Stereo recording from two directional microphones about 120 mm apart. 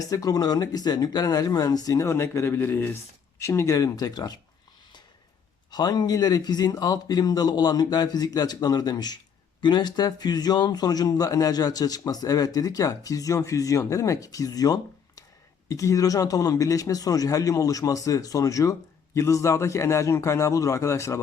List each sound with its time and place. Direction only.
0.0 s speech: 30° left (ahead or behind)
5.7 s speech: 35° left (ahead or behind)